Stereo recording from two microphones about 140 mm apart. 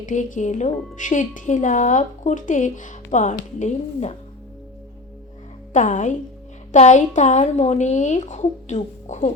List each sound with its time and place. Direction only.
0.0 s speech: 65° left (ahead or behind)
5.7 s speech: 60° left (ahead or behind)